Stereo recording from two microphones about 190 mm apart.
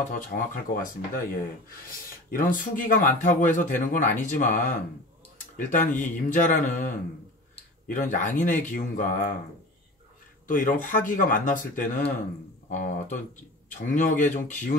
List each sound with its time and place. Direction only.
0.3 s speech: 50° left (ahead or behind)
10.4 s speech: 45° left (ahead or behind)